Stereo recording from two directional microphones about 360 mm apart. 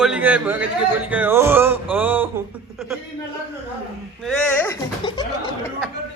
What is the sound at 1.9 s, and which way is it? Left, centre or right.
Speech, centre.